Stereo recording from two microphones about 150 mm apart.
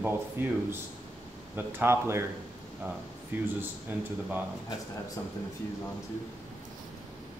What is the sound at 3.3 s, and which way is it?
Speech, 10° right (ahead or behind).